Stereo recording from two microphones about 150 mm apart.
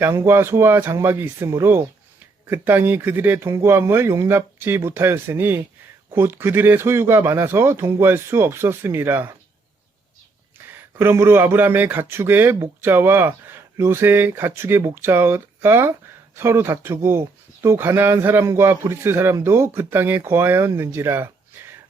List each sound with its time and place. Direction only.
0.0 s speech: 15° right (ahead or behind)
10.8 s speech: 15° right (ahead or behind)